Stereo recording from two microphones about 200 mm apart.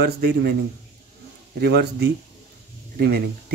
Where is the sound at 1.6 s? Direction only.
55° right (ahead or behind).